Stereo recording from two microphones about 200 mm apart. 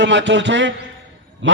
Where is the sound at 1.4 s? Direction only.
70° right (ahead or behind).